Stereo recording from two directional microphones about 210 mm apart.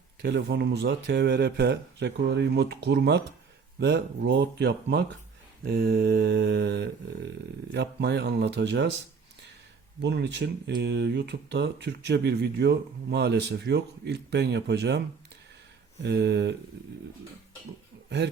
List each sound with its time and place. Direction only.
0.2 s speech: 55° right (ahead or behind)
10.0 s speech: 55° right (ahead or behind)
16.0 s speech: 55° right (ahead or behind)